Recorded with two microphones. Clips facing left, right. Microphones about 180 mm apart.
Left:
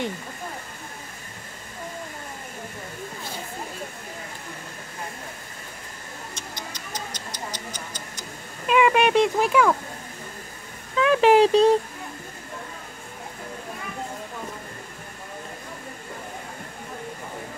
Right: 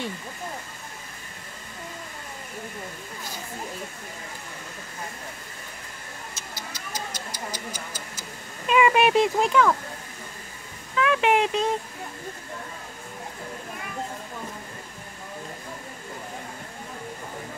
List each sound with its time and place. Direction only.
6.3 s tick-tock: 5° right (ahead or behind); by 9.8 s 10° left (ahead or behind)
11.0 s speech: 35° left (ahead or behind)